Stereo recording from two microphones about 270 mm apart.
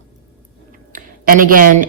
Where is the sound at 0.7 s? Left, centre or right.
Right.